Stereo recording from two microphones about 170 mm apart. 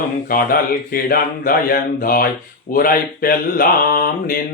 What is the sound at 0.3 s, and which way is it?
Mantra, 60° left (ahead or behind).